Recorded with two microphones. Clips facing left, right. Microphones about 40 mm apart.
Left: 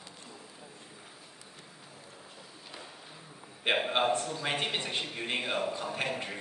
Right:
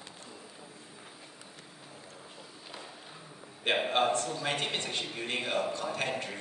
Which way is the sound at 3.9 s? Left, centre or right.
Centre.